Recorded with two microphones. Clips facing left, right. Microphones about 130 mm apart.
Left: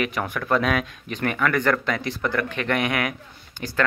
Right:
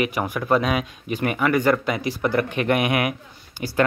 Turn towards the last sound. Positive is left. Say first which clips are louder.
# right 3 dB
turn(degrees=-10)  # may be behind; listen again after turning